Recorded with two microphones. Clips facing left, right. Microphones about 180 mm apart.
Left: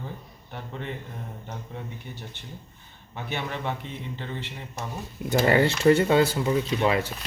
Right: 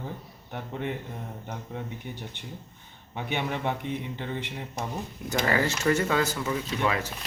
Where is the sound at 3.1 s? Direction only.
15° right (ahead or behind).